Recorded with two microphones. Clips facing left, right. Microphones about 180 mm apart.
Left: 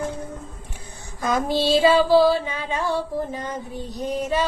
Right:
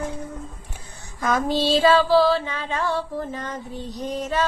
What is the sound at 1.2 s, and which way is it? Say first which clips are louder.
Female singing: even; 15° left (ahead or behind).